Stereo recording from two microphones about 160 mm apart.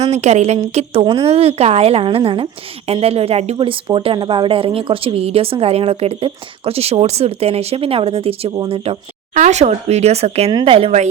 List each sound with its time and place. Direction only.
0.0 s speech: 45° right (ahead or behind)
8.5 s speech: 25° right (ahead or behind)
8.8 s speech: 40° right (ahead or behind)